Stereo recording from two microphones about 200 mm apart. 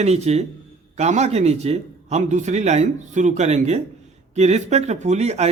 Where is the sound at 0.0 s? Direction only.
35° right (ahead or behind).